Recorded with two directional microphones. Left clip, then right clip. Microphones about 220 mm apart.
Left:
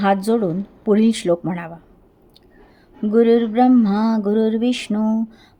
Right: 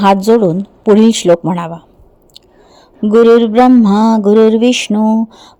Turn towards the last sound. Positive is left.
turn(degrees=-30)  # may be behind; listen again after turning